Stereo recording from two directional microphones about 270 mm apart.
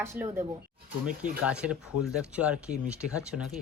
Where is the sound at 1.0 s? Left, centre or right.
Right.